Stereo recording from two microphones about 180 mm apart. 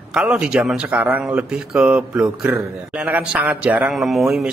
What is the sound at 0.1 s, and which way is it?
Speech, 5° right (ahead or behind).